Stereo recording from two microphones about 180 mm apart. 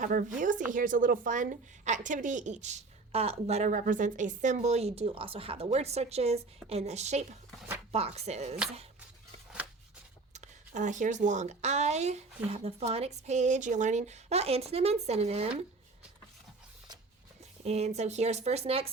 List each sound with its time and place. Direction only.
0.0 s a woman's voice: 50° right (ahead or behind)
10.3 s a woman's voice: 40° right (ahead or behind)
17.6 s a woman's voice: 35° right (ahead or behind)